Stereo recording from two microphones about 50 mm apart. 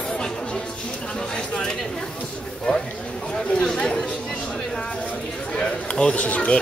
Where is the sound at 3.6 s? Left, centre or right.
Centre.